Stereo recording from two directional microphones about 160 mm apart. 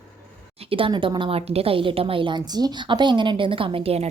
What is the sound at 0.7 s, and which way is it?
A woman's voice, 35° right (ahead or behind).